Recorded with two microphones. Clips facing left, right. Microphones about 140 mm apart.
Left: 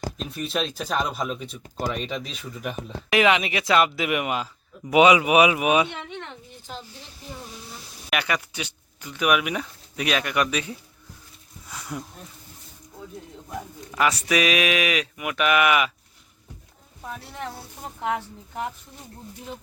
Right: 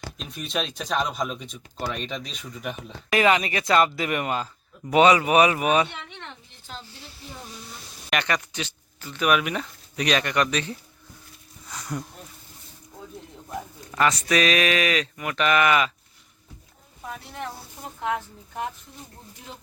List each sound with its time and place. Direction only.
0.2 s speech: centre (ahead or behind)
1.6 s speech: 40° left (ahead or behind)
1.9 s speech: 5° left (ahead or behind)
6.1 s a sound: 10° left (ahead or behind)
8.1 s speech: 5° left (ahead or behind)
11.7 s a sound: 5° left (ahead or behind)
13.9 s speech: 10° left (ahead or behind)